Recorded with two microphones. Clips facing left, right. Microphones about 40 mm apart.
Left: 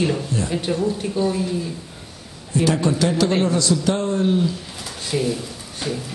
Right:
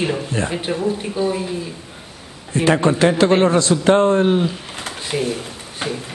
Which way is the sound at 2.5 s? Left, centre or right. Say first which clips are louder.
Right 3 dB; right.